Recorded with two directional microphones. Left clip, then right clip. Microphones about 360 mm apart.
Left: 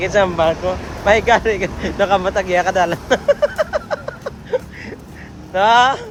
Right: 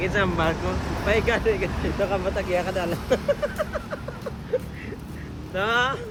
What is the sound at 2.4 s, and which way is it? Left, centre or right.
Speech, left.